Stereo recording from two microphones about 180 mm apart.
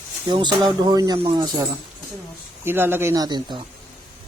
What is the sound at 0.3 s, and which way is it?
Speech, 25° right (ahead or behind).